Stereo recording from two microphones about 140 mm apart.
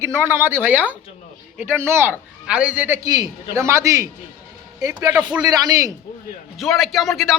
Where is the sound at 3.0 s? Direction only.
25° right (ahead or behind).